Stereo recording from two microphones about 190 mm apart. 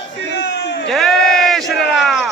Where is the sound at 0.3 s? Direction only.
65° left (ahead or behind).